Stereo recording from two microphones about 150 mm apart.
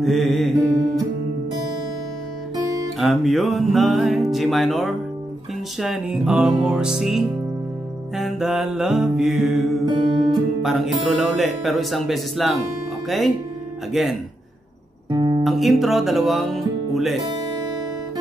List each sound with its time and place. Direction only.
0.0 s music: centre (ahead or behind)
2.5 s music: 20° right (ahead or behind)
3.0 s music: centre (ahead or behind)
14.0 s music: centre (ahead or behind)
15.0 s music: 30° right (ahead or behind)
15.4 s music: centre (ahead or behind)